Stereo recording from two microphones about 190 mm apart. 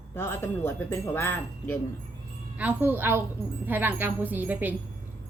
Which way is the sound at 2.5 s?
10° right (ahead or behind).